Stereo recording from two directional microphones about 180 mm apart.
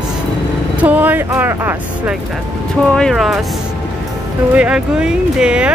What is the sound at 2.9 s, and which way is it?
Speech, 5° left (ahead or behind).